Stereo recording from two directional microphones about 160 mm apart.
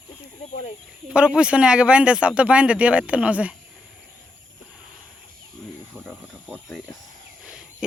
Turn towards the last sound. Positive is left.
turn(degrees=-5)  # may be behind; listen again after turning